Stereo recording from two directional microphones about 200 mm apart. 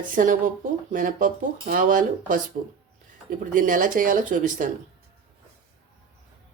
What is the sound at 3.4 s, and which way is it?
Speech, 40° right (ahead or behind).